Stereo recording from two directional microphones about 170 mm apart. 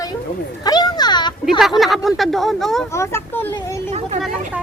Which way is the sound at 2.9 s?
15° left (ahead or behind).